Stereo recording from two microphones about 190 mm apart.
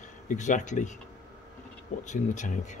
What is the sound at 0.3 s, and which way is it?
Speech, 40° left (ahead or behind).